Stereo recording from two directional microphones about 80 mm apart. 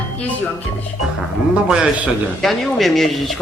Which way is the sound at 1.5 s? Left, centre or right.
Centre.